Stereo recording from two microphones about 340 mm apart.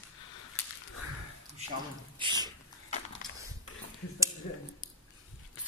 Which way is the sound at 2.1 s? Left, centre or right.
Centre.